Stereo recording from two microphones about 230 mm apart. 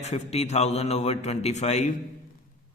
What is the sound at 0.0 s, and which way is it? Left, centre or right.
A man's voice, left.